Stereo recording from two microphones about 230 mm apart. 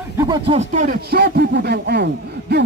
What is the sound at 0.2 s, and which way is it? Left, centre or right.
Speech, centre.